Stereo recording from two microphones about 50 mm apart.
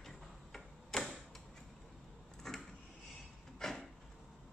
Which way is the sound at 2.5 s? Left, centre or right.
Centre.